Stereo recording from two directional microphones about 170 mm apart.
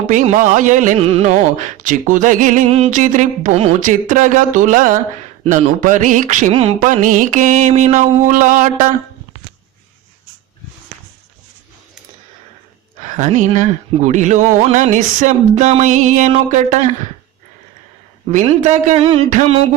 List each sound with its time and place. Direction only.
0.1 s speech: 45° right (ahead or behind)
6.7 s speech: 50° right (ahead or behind)
13.0 s speech: 45° right (ahead or behind)
18.3 s speech: 45° right (ahead or behind)
19.3 s music: 40° right (ahead or behind)